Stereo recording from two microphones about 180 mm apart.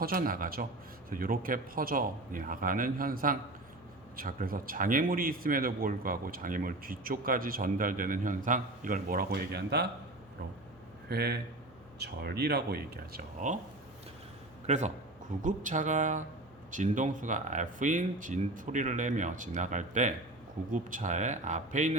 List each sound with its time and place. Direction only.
0.0 s speech: 55° right (ahead or behind)
11.1 s speech: 65° right (ahead or behind)
14.7 s a man's voice: 40° right (ahead or behind)